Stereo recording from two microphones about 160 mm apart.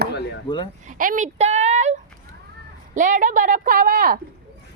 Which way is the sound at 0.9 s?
55° right (ahead or behind).